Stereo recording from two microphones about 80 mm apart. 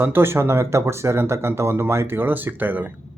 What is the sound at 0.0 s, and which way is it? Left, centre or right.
Speech, right.